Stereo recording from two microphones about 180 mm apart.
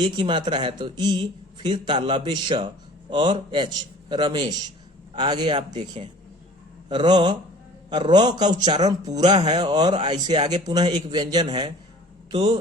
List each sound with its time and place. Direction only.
0.0 s speech: 25° right (ahead or behind)